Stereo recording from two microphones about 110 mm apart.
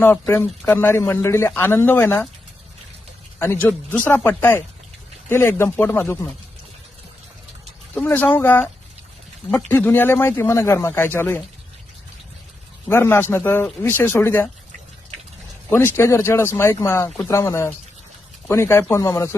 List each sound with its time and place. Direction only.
0.0 s a man's voice: 20° left (ahead or behind)
3.3 s a man's voice: 20° left (ahead or behind)
7.9 s a man's voice: 15° left (ahead or behind)
12.9 s a man's voice: 20° left (ahead or behind)
15.7 s a man's voice: 20° left (ahead or behind)